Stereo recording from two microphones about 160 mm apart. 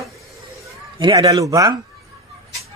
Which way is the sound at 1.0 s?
25° right (ahead or behind).